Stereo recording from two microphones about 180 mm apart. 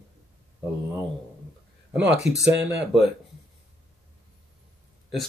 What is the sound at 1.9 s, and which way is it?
Speech, 75° right (ahead or behind).